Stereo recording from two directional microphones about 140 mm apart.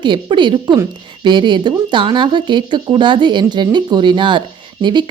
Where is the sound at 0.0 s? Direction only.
35° right (ahead or behind).